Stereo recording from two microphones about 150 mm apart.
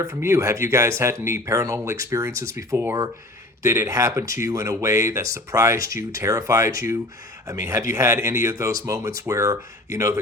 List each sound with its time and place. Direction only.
0.0 s speech: 20° right (ahead or behind)